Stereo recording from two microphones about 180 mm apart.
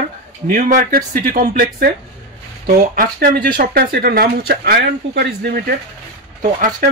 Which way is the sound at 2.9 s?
55° right (ahead or behind).